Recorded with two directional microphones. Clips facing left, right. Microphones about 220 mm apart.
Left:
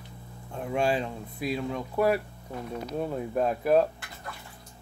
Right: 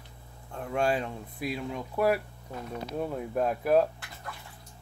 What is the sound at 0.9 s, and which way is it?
Speech, 5° right (ahead or behind).